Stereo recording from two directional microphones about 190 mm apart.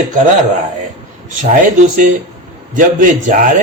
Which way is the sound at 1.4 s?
45° right (ahead or behind).